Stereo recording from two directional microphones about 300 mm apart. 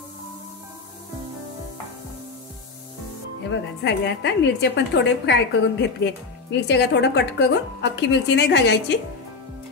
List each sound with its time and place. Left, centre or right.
3.4 s a woman's voice: left